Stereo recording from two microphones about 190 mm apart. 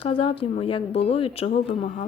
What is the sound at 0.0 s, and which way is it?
Speech, 25° left (ahead or behind).